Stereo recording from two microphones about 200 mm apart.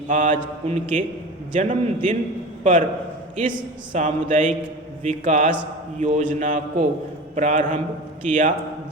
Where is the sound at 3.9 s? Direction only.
40° right (ahead or behind).